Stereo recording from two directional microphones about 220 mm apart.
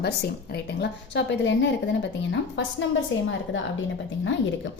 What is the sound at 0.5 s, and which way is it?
A woman's voice, 50° left (ahead or behind).